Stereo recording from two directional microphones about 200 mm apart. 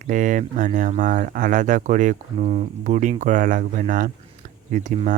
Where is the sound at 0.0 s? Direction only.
40° right (ahead or behind).